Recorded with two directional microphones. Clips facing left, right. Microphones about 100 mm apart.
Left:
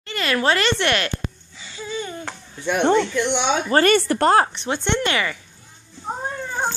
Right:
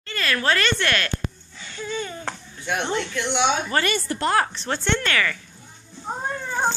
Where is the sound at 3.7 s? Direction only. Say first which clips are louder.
Left 6 dB; 30° left (ahead or behind).